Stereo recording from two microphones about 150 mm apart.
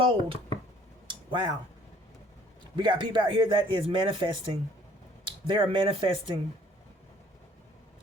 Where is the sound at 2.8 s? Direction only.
30° right (ahead or behind).